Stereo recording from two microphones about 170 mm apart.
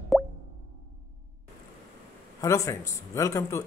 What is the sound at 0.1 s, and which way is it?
Plop, centre (ahead or behind).